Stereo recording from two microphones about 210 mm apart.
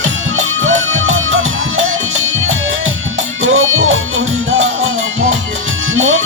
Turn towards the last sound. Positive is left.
turn(degrees=-70)  # may be behind; listen again after turning